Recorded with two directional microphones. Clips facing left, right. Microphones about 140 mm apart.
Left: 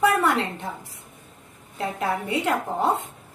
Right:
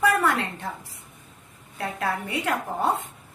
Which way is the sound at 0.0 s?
25° left (ahead or behind).